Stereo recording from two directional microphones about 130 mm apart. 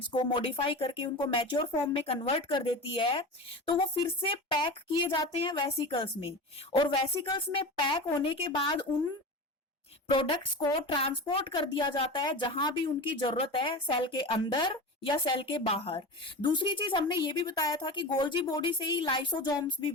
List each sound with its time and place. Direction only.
0.1 s speech: 40° left (ahead or behind)
2.5 s a woman's voice: 40° left (ahead or behind)
10.1 s a woman's voice: 40° left (ahead or behind)